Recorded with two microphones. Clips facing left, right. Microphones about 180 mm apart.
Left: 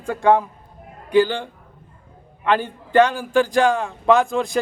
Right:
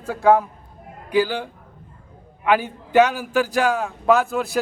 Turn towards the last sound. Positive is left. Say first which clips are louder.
# left 1 dB
turn(degrees=-5)  # may be behind; listen again after turning